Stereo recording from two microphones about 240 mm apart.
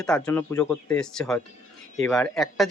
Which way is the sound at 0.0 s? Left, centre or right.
Centre.